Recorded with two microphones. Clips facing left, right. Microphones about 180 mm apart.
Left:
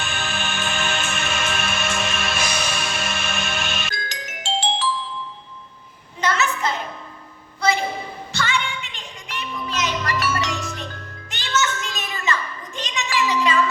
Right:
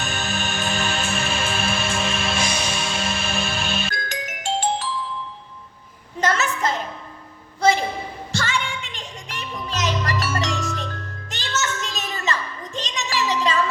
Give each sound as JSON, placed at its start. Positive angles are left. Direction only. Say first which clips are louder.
{"t": 0.0, "sound": "music", "louder": "right 1 dB", "side_deg": -40}
{"t": 3.9, "sound": "music", "louder": "right 3 dB", "side_deg": -55}
{"t": 6.1, "sound": "a sound", "louder": "right 1 dB", "side_deg": -45}
{"t": 8.3, "sound": "music", "louder": "left 1 dB", "side_deg": -40}
{"t": 12.9, "sound": "a sound", "louder": "left 2 dB", "side_deg": -40}
{"t": 13.4, "sound": "music", "louder": "left 2 dB", "side_deg": -40}